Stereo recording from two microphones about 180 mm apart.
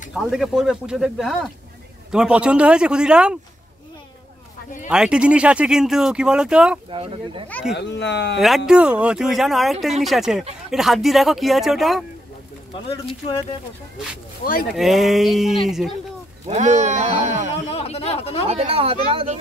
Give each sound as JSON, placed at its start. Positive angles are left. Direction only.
{"t": 0.1, "sound": "speech", "side_deg": 0}
{"t": 4.8, "sound": "speech", "side_deg": -5}
{"t": 6.9, "sound": "speech", "side_deg": -30}
{"t": 7.7, "sound": "speech", "side_deg": 75}
{"t": 8.4, "sound": "speech", "side_deg": 0}
{"t": 12.7, "sound": "speech", "side_deg": 30}
{"t": 14.4, "sound": "speech", "side_deg": 55}
{"t": 14.7, "sound": "speech", "side_deg": 0}
{"t": 16.4, "sound": "speech", "side_deg": -40}
{"t": 17.6, "sound": "speech", "side_deg": 35}
{"t": 18.5, "sound": "speech", "side_deg": -35}